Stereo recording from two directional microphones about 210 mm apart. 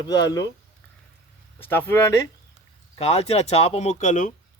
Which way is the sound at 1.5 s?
10° left (ahead or behind).